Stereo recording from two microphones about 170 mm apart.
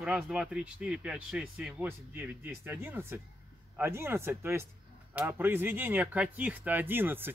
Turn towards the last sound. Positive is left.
turn(degrees=-10)  # may be behind; listen again after turning